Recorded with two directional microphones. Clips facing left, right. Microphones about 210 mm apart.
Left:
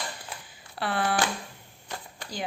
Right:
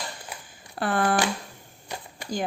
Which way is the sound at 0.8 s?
45° right (ahead or behind).